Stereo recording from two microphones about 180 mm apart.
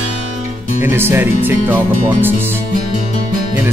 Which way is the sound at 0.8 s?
10° right (ahead or behind).